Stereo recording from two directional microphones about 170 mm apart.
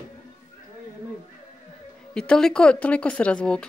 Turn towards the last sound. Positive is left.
turn(degrees=5)  # may be behind; listen again after turning